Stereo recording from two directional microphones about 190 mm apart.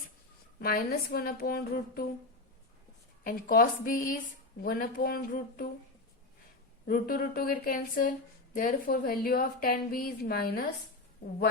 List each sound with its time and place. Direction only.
0.6 s a woman's voice: 50° left (ahead or behind)
3.2 s a woman's voice: 45° left (ahead or behind)
6.8 s a woman's voice: 45° left (ahead or behind)